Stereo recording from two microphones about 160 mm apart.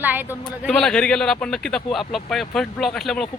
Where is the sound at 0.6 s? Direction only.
5° left (ahead or behind).